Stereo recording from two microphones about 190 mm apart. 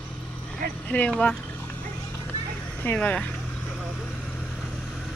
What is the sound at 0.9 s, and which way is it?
Speech, 10° left (ahead or behind).